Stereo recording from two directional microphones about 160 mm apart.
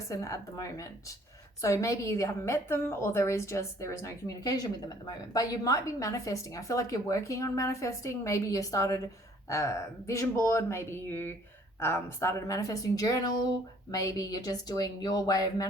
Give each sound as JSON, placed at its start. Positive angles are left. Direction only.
{"t": 0.1, "sound": "a woman's voice", "side_deg": 20}